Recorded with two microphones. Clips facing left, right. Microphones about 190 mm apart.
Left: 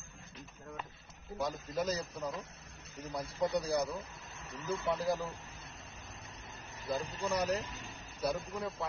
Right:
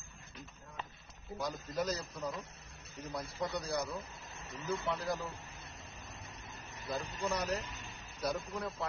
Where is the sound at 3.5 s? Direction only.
35° left (ahead or behind).